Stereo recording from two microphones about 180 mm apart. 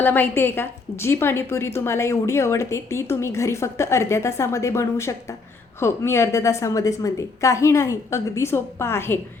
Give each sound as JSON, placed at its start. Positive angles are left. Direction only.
{"t": 0.0, "sound": "a woman's voice", "side_deg": 10}